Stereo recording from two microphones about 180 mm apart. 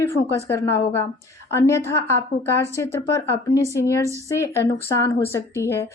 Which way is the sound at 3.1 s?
15° left (ahead or behind).